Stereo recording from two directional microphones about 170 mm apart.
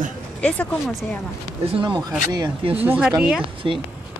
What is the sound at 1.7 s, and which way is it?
Speech, 30° right (ahead or behind).